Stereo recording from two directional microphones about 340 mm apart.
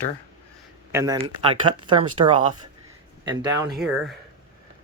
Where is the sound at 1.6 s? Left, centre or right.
Right.